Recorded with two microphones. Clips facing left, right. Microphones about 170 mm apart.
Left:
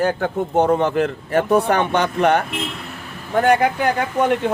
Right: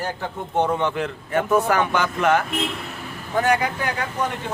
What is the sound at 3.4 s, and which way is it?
Speech, 55° left (ahead or behind).